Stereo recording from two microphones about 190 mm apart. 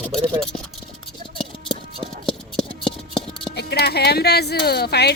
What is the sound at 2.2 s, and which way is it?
Music, 5° left (ahead or behind).